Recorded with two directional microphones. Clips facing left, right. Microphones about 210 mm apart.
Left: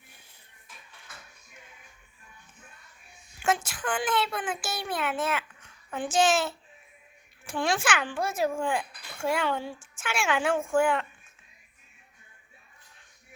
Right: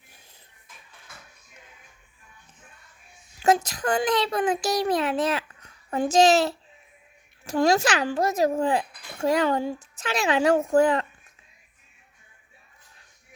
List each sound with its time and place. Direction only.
3.4 s a child's voice: 40° right (ahead or behind)